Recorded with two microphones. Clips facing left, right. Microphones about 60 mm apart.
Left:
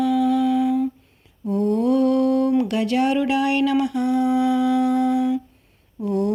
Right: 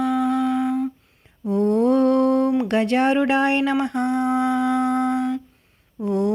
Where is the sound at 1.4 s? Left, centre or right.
Right.